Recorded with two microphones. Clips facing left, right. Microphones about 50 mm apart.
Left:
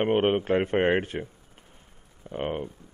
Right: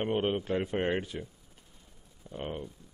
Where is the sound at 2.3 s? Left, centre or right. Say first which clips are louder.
Left 7 dB; left.